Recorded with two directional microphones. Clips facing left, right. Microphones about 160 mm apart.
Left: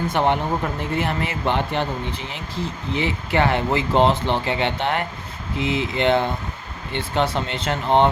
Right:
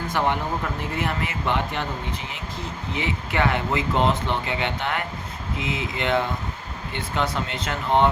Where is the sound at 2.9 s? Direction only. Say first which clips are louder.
Left 4 dB; 30° left (ahead or behind).